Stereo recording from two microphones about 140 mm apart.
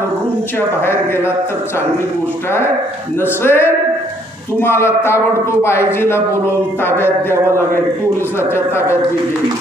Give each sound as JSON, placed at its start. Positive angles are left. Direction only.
{"t": 0.6, "sound": "a man's voice", "side_deg": 15}
{"t": 3.2, "sound": "a man's voice", "side_deg": 15}